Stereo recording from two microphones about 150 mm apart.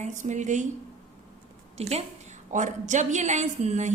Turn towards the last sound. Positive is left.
turn(degrees=-50)  # may be behind; listen again after turning